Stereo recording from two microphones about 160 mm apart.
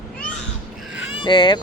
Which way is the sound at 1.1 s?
30° left (ahead or behind).